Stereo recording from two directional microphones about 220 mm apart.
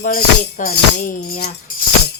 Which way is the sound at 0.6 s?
35° left (ahead or behind).